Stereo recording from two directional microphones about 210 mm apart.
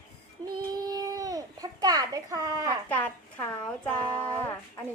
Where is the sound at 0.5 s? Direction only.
20° right (ahead or behind).